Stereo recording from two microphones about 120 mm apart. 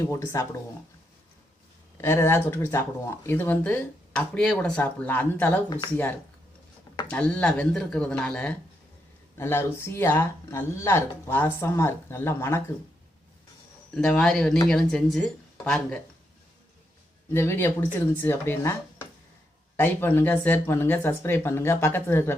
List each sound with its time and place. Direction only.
0.0 s speech: 25° left (ahead or behind)
2.0 s speech: 20° left (ahead or behind)
7.1 s speech: 10° left (ahead or behind)
13.9 s speech: 5° left (ahead or behind)
17.3 s speech: 20° left (ahead or behind)